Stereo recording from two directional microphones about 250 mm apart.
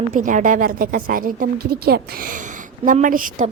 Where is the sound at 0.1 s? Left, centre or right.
Right.